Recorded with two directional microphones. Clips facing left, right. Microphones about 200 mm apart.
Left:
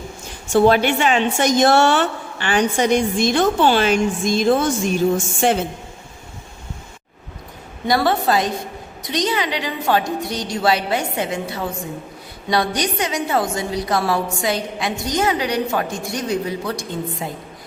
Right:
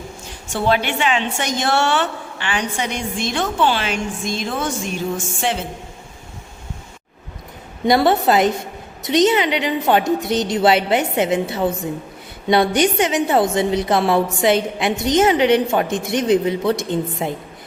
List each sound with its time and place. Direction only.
0.5 s a woman's voice: 40° left (ahead or behind)
7.9 s a woman's voice: 20° right (ahead or behind)